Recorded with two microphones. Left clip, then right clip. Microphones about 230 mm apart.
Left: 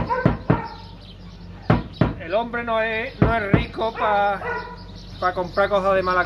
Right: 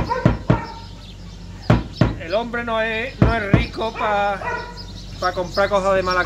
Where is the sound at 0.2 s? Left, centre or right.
Centre.